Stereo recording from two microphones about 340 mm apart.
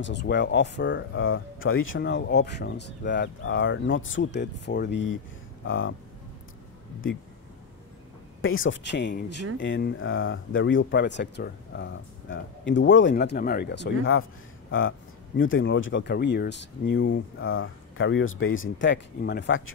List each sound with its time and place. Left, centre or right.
0.0 s speech: left
8.4 s speech: left